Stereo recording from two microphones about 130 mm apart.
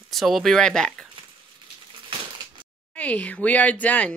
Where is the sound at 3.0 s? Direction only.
10° left (ahead or behind).